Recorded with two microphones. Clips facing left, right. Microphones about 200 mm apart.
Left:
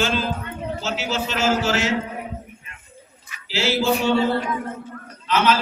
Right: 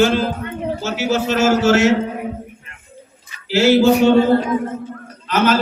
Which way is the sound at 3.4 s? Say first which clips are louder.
Right 9 dB; 55° right (ahead or behind).